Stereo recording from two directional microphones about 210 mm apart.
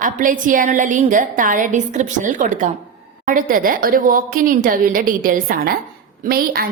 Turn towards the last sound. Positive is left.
turn(degrees=-45)  # may be behind; listen again after turning